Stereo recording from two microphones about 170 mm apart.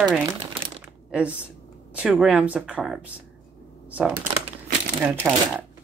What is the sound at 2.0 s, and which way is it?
Speech, 5° right (ahead or behind).